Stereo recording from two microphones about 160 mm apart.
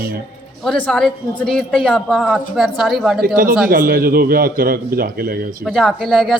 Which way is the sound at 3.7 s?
65° right (ahead or behind).